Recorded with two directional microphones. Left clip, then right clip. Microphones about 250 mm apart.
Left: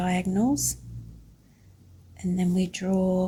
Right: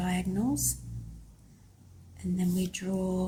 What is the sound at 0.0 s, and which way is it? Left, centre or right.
Speech, left.